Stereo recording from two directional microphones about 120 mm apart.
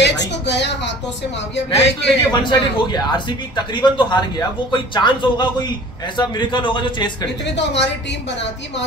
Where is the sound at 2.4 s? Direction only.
35° left (ahead or behind).